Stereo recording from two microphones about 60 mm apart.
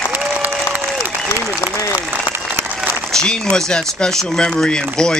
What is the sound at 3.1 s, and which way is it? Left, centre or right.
A man's voice, centre.